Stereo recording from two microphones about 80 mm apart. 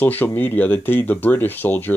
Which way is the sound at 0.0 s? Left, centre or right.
Left.